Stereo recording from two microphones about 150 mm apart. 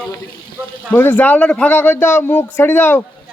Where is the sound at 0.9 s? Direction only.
15° left (ahead or behind).